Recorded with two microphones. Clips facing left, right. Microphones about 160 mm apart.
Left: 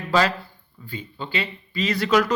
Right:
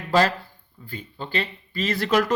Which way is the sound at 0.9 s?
50° right (ahead or behind).